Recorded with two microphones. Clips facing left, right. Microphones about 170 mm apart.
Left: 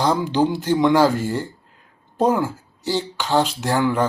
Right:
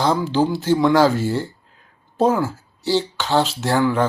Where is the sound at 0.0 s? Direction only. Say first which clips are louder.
Even; 15° left (ahead or behind).